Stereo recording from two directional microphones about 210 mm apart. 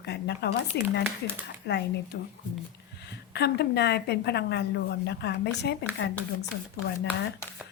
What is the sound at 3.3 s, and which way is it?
Speech, 50° left (ahead or behind).